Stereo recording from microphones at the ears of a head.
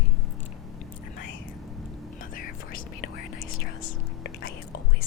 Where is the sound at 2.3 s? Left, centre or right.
Left.